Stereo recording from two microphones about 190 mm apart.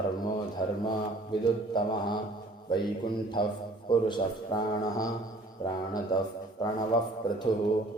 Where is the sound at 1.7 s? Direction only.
25° left (ahead or behind).